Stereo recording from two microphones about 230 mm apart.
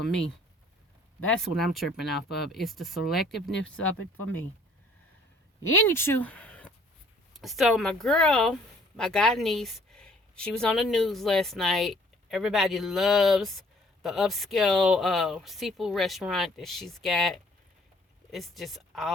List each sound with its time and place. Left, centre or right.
1.2 s a woman's voice: centre
5.6 s speech: left
5.9 s a sound: centre
7.3 s a woman's voice: centre